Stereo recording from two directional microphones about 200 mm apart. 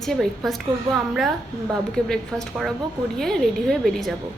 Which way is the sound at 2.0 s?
5° left (ahead or behind).